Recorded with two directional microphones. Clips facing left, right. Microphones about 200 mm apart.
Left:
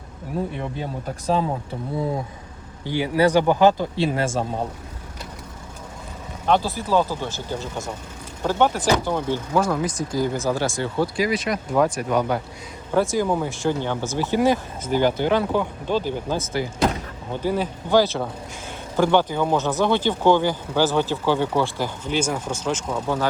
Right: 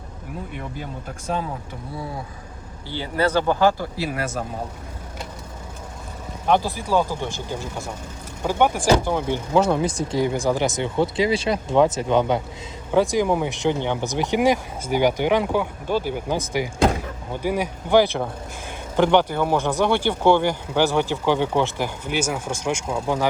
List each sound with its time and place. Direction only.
2.8 s speech: 15° left (ahead or behind)
6.4 s speech: 15° right (ahead or behind)
8.4 s speech: 15° right (ahead or behind)
9.5 s speech: 25° right (ahead or behind)
10.3 s speech: 15° right (ahead or behind)